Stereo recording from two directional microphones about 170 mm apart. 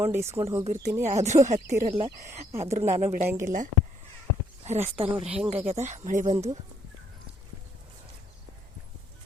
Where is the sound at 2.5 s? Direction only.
15° right (ahead or behind).